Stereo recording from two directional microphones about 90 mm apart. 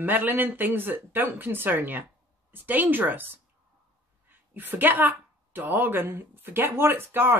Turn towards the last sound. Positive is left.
turn(degrees=-25)  # may be behind; listen again after turning